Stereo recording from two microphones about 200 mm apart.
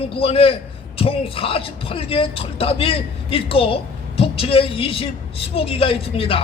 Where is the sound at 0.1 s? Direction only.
30° left (ahead or behind).